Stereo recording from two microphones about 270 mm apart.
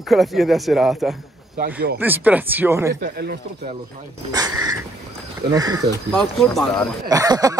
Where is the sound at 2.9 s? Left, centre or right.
Right.